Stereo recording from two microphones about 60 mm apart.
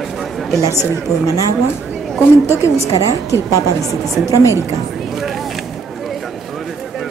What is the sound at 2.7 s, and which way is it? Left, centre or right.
Speech, right.